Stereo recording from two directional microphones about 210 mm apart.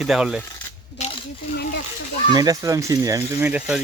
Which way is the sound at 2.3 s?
15° right (ahead or behind).